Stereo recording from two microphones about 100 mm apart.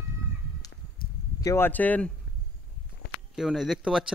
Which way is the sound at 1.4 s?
30° left (ahead or behind).